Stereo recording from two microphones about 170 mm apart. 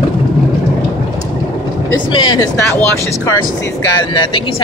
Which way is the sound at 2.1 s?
25° left (ahead or behind).